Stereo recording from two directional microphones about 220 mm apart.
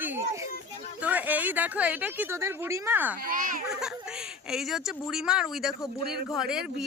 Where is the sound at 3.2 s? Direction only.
40° right (ahead or behind).